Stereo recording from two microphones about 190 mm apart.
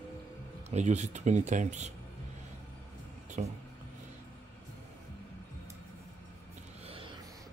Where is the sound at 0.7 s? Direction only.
40° right (ahead or behind).